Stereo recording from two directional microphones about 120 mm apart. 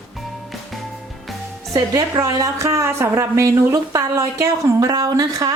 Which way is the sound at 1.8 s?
30° right (ahead or behind).